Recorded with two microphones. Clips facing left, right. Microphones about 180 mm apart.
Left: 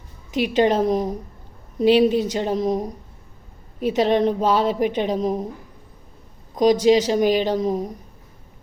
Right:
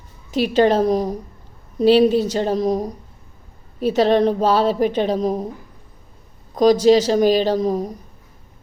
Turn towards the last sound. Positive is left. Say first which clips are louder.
# right 3 dB
turn(degrees=20)  # may be behind; listen again after turning